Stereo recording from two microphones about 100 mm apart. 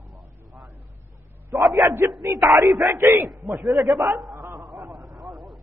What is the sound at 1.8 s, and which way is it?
Speech, 30° right (ahead or behind).